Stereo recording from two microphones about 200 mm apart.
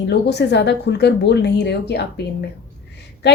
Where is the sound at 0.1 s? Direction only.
55° left (ahead or behind).